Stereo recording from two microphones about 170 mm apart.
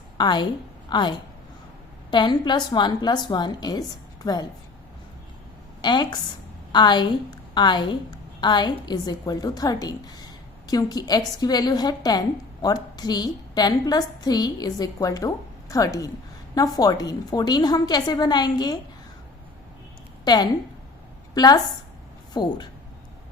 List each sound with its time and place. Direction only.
0.2 s a woman's voice: 25° left (ahead or behind)
5.8 s a woman's voice: 25° left (ahead or behind)
20.2 s a woman's voice: 25° left (ahead or behind)